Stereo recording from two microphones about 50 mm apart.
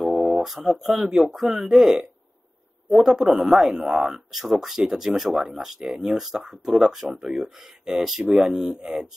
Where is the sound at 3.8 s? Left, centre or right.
Centre.